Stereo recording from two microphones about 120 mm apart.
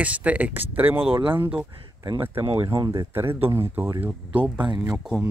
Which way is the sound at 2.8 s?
35° right (ahead or behind).